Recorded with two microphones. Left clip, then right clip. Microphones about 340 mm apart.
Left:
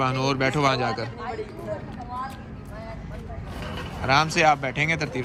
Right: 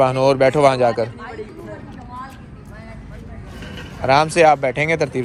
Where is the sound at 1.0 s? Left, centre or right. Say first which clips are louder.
Right 4 dB; left.